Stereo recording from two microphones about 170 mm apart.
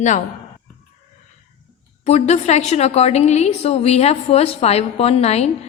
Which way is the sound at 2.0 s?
40° left (ahead or behind).